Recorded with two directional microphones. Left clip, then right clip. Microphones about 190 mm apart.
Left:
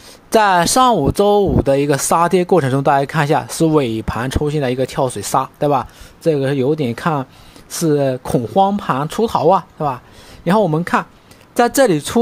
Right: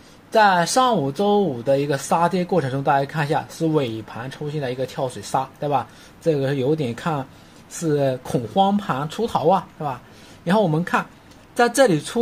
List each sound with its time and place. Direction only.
0.3 s speech: 40° left (ahead or behind)